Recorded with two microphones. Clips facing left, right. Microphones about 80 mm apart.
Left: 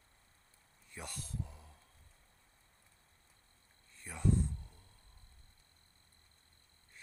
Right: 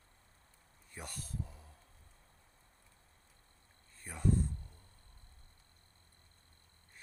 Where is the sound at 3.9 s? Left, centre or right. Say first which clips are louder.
Even; right.